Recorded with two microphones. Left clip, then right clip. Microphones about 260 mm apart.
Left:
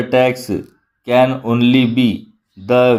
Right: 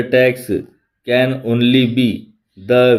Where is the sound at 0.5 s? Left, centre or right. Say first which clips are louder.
Right 2 dB; left.